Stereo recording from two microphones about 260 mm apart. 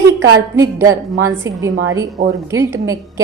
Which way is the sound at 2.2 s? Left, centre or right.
Right.